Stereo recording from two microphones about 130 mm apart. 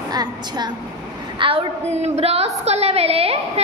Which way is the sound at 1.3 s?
40° right (ahead or behind).